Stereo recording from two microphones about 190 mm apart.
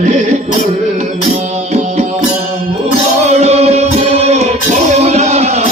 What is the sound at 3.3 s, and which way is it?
Music, 35° right (ahead or behind).